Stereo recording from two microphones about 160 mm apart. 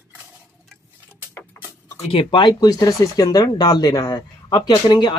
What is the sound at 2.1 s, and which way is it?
Speech, 30° left (ahead or behind).